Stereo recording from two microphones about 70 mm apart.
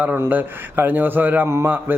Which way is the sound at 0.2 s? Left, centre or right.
Right.